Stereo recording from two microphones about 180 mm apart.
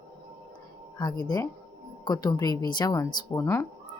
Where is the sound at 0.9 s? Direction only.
20° left (ahead or behind).